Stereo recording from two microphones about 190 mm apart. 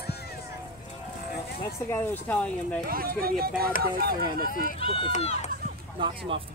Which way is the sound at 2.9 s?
50° right (ahead or behind).